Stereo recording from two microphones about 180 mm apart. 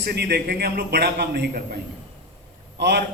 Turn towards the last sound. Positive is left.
turn(degrees=-65)  # may be behind; listen again after turning